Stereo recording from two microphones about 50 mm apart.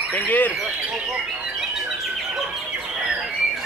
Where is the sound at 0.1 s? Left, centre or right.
Left.